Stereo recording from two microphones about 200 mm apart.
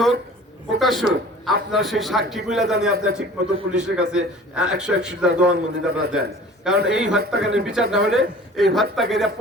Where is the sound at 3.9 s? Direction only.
5° right (ahead or behind).